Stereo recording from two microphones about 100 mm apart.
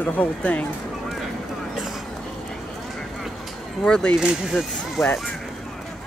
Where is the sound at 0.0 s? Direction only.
15° left (ahead or behind).